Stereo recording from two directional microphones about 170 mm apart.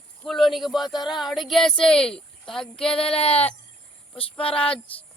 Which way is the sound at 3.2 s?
35° left (ahead or behind).